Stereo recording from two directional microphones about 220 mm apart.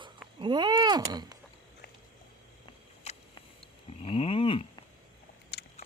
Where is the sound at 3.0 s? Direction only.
30° left (ahead or behind).